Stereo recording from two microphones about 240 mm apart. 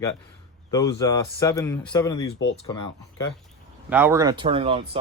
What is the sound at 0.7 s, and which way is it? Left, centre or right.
A man's voice, centre.